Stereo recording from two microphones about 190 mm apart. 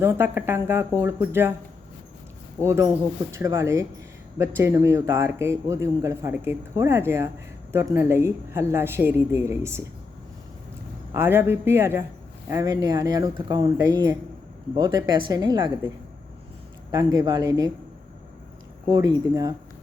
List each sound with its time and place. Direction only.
0.0 s a man's voice: 10° right (ahead or behind)
2.6 s a man's voice: 15° right (ahead or behind)
11.1 s a man's voice: 10° right (ahead or behind)
16.9 s speech: 20° right (ahead or behind)
18.9 s speech: 20° right (ahead or behind)